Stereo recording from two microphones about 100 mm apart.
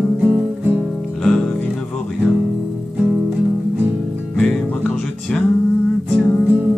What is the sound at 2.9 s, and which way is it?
Music, 5° right (ahead or behind).